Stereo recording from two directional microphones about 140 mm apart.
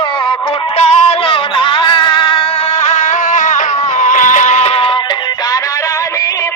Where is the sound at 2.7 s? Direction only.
55° left (ahead or behind).